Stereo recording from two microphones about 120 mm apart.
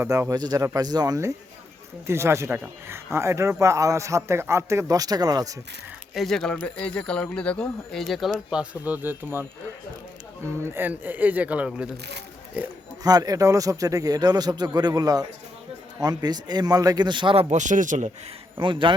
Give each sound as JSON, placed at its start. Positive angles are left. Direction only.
{"t": 0.0, "sound": "speech", "side_deg": -25}
{"t": 6.1, "sound": "speech", "side_deg": 5}
{"t": 10.7, "sound": "speech", "side_deg": -15}
{"t": 13.0, "sound": "a man's voice", "side_deg": -30}
{"t": 17.5, "sound": "speech", "side_deg": -90}
{"t": 18.5, "sound": "speech", "side_deg": -45}